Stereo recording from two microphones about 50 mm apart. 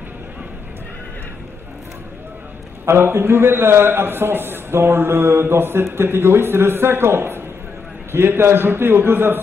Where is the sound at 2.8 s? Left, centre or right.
Right.